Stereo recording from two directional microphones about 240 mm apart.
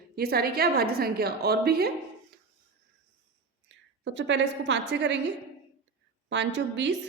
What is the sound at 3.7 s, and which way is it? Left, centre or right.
A woman's voice, right.